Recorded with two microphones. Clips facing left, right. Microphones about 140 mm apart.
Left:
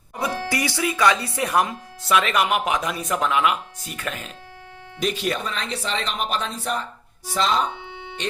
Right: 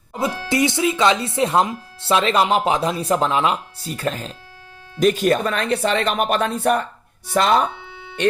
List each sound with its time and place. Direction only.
0.1 s speech: 25° right (ahead or behind)
4.9 s speech: 45° right (ahead or behind)
7.8 s music: 20° left (ahead or behind)